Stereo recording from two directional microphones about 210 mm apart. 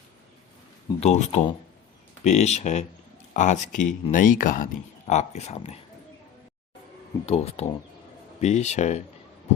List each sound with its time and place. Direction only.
0.9 s speech: 30° left (ahead or behind)
7.3 s speech: 30° left (ahead or behind)